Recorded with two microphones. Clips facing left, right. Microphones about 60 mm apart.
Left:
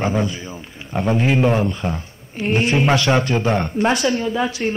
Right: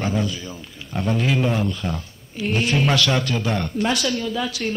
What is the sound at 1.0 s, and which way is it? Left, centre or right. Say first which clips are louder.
Speech: left 4 dB; left.